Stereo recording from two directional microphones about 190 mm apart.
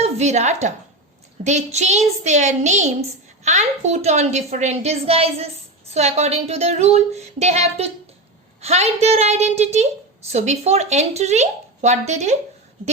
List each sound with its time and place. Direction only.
0.0 s speech: 35° right (ahead or behind)